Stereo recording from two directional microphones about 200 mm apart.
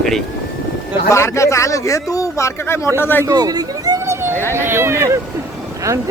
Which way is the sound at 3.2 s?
20° right (ahead or behind).